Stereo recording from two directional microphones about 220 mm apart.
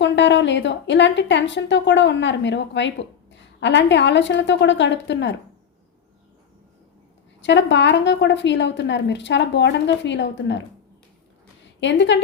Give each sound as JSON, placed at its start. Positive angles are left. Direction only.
{"t": 0.0, "sound": "a woman's voice", "side_deg": 55}
{"t": 7.4, "sound": "a woman's voice", "side_deg": 55}
{"t": 11.8, "sound": "a woman's voice", "side_deg": 55}